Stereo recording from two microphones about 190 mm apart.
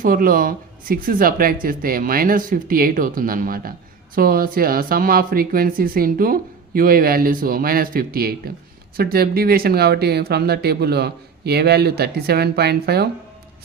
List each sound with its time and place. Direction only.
0.0 s speech: 50° right (ahead or behind)